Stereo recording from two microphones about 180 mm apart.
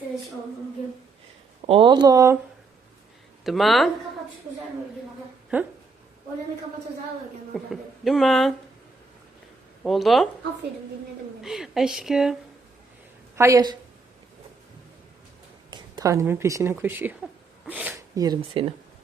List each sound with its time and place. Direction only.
1.6 s speech: 30° right (ahead or behind)
3.4 s speech: centre (ahead or behind)
5.5 s a woman's voice: 10° right (ahead or behind)
7.5 s speech: centre (ahead or behind)
9.8 s speech: centre (ahead or behind)
11.4 s speech: centre (ahead or behind)
13.3 s a woman's voice: 15° right (ahead or behind)
15.7 s speech: 20° right (ahead or behind)